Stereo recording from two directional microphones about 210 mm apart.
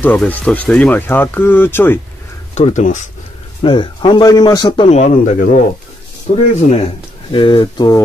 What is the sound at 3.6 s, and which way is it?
A man's voice, 20° left (ahead or behind).